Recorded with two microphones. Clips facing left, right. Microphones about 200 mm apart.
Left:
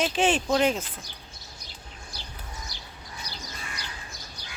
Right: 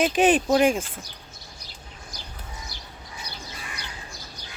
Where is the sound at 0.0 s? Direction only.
15° right (ahead or behind).